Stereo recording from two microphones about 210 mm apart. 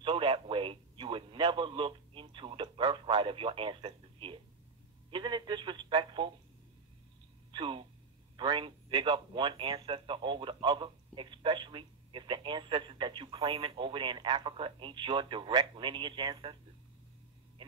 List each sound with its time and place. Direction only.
0.0 s radio: 25° right (ahead or behind)
5.1 s telephone: 20° right (ahead or behind)
7.5 s a sound: 25° right (ahead or behind)
8.4 s a man's voice: 25° right (ahead or behind)